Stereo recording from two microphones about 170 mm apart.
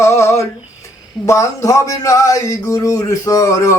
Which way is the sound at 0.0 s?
15° left (ahead or behind).